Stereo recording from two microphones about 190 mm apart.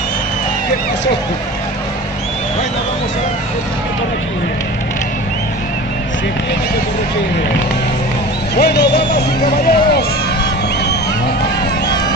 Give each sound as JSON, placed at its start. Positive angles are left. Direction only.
{"t": 8.5, "sound": "speech", "side_deg": 60}